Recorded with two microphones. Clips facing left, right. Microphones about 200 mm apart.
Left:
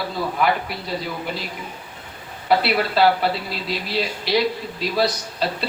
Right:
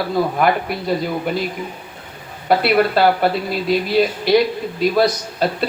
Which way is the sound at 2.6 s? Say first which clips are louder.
Right 7 dB; 50° right (ahead or behind).